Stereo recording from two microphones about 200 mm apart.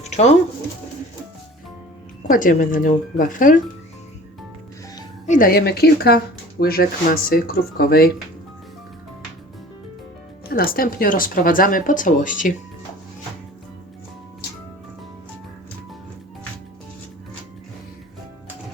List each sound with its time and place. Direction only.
0.0 s music: 35° left (ahead or behind)
2.2 s speech: 45° left (ahead or behind)
5.2 s speech: 40° left (ahead or behind)
10.5 s speech: 45° left (ahead or behind)